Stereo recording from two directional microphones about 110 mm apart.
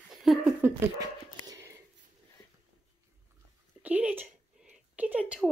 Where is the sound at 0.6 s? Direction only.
20° right (ahead or behind).